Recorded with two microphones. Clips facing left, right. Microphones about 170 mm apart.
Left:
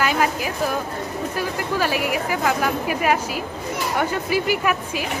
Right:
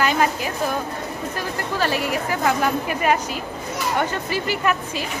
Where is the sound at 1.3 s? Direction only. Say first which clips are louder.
Left 3 dB; 10° left (ahead or behind).